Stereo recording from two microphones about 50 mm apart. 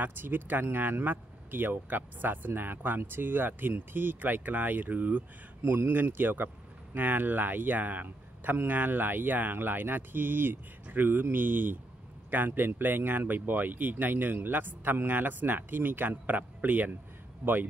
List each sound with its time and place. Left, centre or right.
0.0 s speech: right